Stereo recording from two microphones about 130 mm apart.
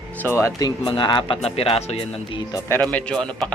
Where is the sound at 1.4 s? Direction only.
50° left (ahead or behind).